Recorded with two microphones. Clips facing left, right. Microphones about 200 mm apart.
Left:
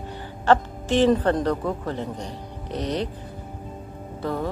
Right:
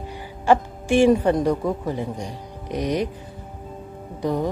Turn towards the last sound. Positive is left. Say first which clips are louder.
# right 4 dB
turn(degrees=-15)  # may be behind; listen again after turning